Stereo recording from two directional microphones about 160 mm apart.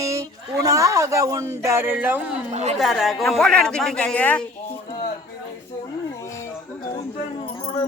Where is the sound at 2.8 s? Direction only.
Centre (ahead or behind).